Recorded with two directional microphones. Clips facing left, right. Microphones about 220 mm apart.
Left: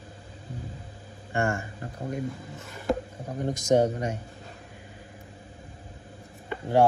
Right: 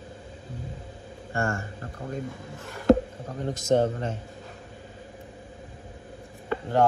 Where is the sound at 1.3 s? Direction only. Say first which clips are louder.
Left 1 dB; 15° left (ahead or behind).